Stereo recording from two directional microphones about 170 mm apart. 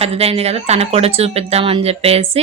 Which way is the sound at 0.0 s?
35° right (ahead or behind).